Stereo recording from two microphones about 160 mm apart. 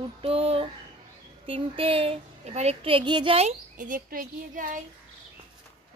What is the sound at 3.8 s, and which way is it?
Speech, 60° right (ahead or behind).